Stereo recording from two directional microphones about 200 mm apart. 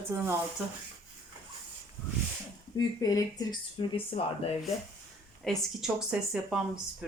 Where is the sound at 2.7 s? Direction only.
15° left (ahead or behind).